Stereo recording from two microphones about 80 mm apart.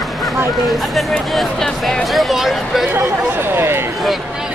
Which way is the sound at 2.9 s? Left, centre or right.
Right.